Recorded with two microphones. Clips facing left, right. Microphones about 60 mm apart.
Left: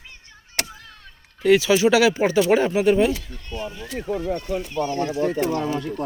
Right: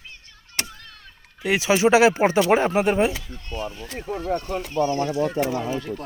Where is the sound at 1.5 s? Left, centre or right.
Right.